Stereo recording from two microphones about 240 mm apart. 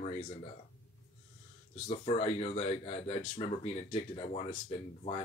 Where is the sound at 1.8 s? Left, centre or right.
Left.